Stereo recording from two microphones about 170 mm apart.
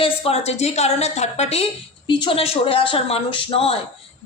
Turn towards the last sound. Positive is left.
turn(degrees=35)  # may be behind; listen again after turning